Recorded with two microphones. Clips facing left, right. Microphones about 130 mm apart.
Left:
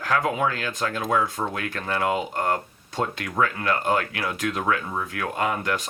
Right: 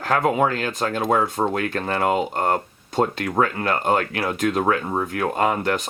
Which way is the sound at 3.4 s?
40° right (ahead or behind).